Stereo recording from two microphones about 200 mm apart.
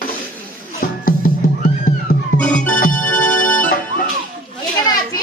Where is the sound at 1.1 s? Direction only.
45° left (ahead or behind).